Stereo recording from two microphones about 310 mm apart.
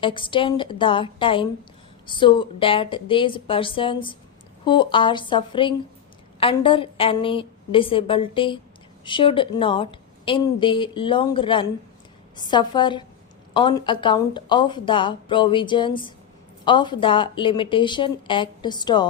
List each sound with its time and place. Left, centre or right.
0.0 s a woman's voice: centre